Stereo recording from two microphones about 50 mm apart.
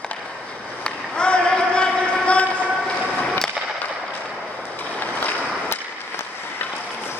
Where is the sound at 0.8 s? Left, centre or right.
Centre.